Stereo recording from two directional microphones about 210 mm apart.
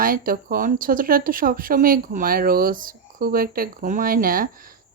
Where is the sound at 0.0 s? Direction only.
45° right (ahead or behind).